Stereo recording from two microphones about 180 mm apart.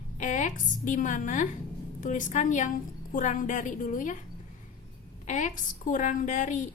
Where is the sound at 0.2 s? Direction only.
40° left (ahead or behind).